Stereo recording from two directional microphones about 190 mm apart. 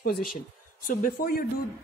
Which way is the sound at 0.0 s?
50° left (ahead or behind).